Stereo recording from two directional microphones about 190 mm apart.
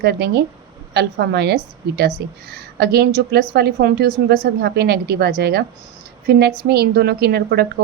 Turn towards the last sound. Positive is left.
turn(degrees=-55)  # may be behind; listen again after turning